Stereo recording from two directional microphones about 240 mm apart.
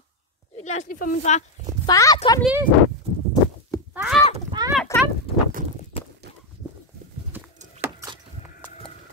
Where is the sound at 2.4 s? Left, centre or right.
Centre.